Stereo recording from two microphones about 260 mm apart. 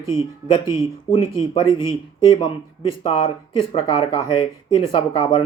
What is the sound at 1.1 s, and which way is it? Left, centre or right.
Speech, centre.